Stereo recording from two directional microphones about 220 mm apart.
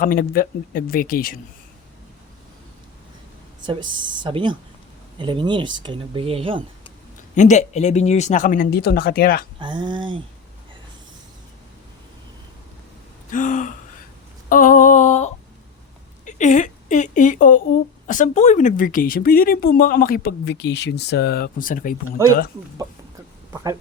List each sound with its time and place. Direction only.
0.0 s speech: 40° left (ahead or behind)
4.0 s speech: 20° right (ahead or behind)
7.3 s speech: 35° left (ahead or behind)
9.6 s speech: 20° right (ahead or behind)
13.3 s gasp: 35° left (ahead or behind)
14.5 s a sound: 40° left (ahead or behind)
16.2 s speech: 35° left (ahead or behind)